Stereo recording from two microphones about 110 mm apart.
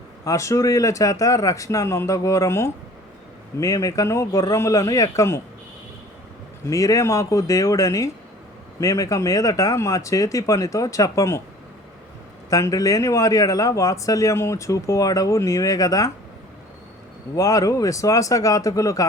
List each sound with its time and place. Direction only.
0.3 s speech: 30° left (ahead or behind)
6.7 s speech: 30° left (ahead or behind)
12.5 s speech: 30° left (ahead or behind)
17.3 s speech: 30° left (ahead or behind)